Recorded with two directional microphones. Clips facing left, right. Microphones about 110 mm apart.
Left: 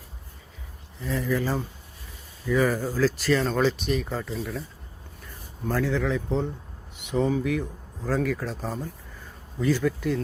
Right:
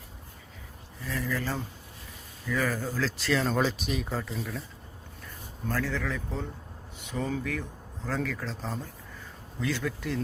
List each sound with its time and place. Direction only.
1.0 s speech: 20° left (ahead or behind)
3.0 s speech: 5° left (ahead or behind)
5.6 s speech: 15° left (ahead or behind)